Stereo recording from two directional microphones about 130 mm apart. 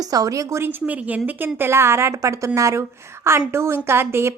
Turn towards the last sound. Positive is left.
turn(degrees=-20)  # may be behind; listen again after turning